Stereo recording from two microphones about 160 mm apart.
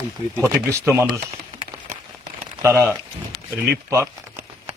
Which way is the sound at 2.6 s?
15° right (ahead or behind).